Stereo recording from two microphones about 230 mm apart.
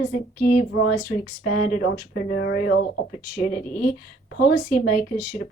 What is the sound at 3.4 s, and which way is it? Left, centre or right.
A woman's voice, left.